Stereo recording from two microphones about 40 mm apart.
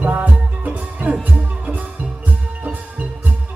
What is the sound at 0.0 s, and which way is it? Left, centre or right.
Music, right.